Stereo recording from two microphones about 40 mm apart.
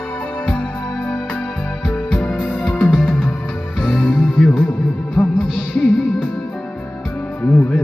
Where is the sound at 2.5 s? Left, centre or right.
Left.